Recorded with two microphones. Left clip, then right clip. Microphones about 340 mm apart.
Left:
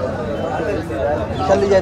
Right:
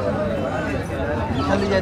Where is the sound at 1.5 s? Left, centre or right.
Left.